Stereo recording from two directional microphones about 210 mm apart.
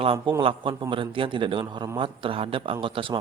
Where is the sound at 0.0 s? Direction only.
25° right (ahead or behind).